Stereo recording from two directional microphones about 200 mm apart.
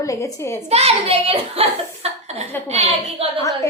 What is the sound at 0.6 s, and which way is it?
A woman's voice, 30° right (ahead or behind).